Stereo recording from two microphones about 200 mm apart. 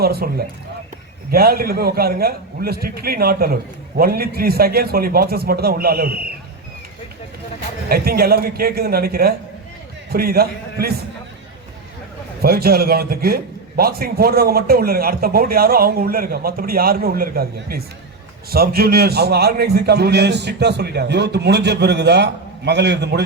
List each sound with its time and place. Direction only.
0.0 s a man's voice: 50° right (ahead or behind)
7.9 s a man's voice: 50° right (ahead or behind)
12.4 s a man's voice: 50° right (ahead or behind)